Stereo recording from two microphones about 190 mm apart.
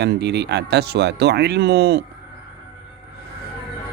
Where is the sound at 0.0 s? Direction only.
60° right (ahead or behind).